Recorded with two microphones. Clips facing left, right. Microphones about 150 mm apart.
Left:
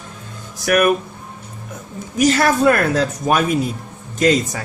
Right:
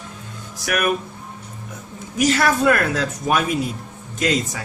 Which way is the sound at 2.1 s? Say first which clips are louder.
Left 3 dB; 40° left (ahead or behind).